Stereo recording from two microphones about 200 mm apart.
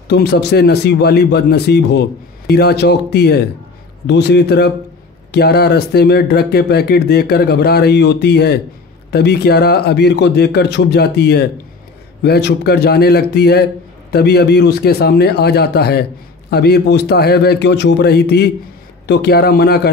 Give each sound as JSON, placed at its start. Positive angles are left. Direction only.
{"t": 0.1, "sound": "a man's voice", "side_deg": 55}